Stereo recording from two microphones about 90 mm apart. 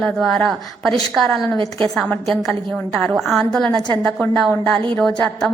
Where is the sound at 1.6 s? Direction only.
60° right (ahead or behind).